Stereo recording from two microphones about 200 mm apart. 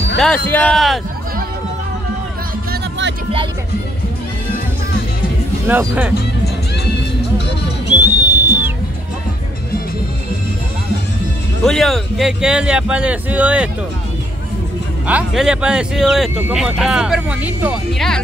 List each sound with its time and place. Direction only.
0.5 s speech: 5° left (ahead or behind)
2.7 s music: 60° right (ahead or behind)
5.7 s speech: 10° right (ahead or behind)
7.9 s whistle: 10° right (ahead or behind)
11.6 s speech: centre (ahead or behind)
15.0 s speech: 5° right (ahead or behind)